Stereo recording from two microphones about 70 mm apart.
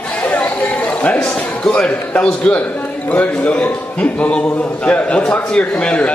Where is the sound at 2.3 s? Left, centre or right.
Centre.